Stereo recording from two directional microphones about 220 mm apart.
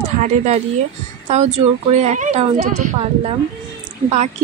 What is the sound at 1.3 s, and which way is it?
Speech, 30° right (ahead or behind).